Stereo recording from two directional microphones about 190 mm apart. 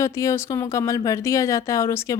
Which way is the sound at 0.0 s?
15° left (ahead or behind).